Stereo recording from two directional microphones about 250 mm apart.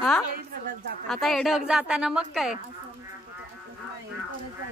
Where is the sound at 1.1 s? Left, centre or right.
Centre.